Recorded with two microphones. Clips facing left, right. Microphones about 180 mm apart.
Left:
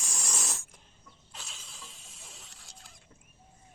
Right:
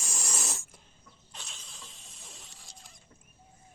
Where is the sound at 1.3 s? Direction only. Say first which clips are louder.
Even; centre (ahead or behind).